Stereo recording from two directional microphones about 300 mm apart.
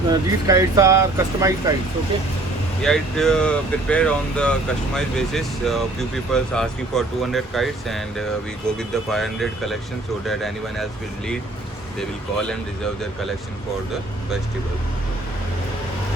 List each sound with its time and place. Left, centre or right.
0.1 s speech: centre
2.8 s speech: centre
11.9 s speech: centre